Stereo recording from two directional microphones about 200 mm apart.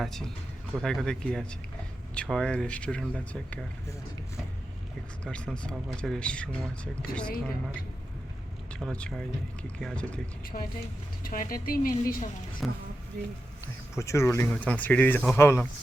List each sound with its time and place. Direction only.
0.0 s speech: centre (ahead or behind)
5.2 s speech: 5° left (ahead or behind)
8.7 s speech: 5° left (ahead or behind)
10.4 s speech: 45° left (ahead or behind)
12.6 s speech: centre (ahead or behind)
13.9 s speech: 15° left (ahead or behind)